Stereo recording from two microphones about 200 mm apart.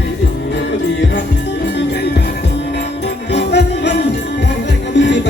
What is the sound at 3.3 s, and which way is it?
Jingle bell, 55° left (ahead or behind).